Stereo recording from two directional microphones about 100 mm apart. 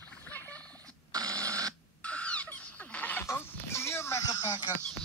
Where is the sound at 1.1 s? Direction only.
40° right (ahead or behind).